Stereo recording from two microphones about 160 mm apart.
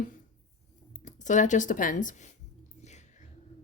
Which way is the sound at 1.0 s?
50° left (ahead or behind).